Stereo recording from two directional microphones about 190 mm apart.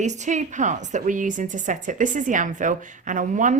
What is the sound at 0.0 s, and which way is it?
A woman's voice, 40° right (ahead or behind).